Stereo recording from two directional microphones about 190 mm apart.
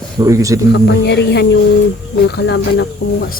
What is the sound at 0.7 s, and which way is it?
Speech, 60° left (ahead or behind).